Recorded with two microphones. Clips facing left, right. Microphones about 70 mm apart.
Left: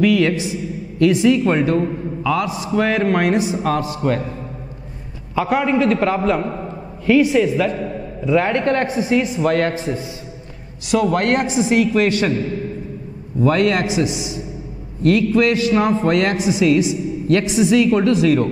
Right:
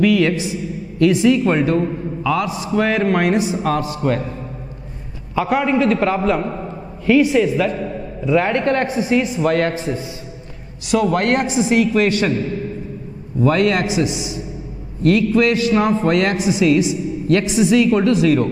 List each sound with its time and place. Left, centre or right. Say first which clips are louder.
0.0 s a man's voice: even; centre
5.3 s a man's voice: even; centre